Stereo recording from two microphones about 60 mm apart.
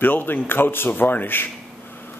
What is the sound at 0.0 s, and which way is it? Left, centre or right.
A man's voice, left.